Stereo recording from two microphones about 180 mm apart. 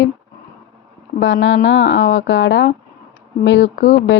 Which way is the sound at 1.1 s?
90° left.